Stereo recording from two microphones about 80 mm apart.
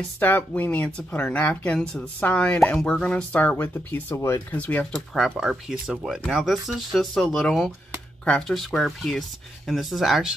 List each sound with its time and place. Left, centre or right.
0.2 s speech: left
1.8 s speech: centre
2.1 s speech: centre
4.1 s speech: left
4.5 s speech: centre
5.1 s speech: centre